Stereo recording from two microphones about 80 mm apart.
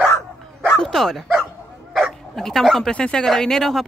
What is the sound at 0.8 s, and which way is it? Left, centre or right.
Bow-wow, centre.